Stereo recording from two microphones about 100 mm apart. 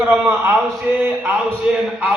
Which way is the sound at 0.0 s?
20° right (ahead or behind).